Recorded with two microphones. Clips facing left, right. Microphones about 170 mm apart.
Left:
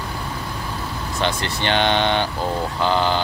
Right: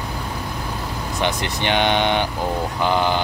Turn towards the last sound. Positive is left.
turn(degrees=-15)  # may be behind; listen again after turning